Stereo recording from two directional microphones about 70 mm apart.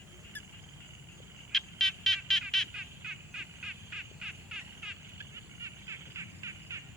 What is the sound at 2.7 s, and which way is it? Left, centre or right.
Squawk, centre.